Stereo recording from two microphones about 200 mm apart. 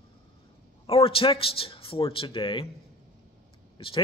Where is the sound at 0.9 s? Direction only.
30° left (ahead or behind).